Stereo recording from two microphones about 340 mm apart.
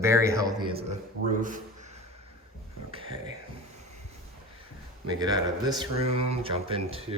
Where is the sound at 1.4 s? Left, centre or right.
Right.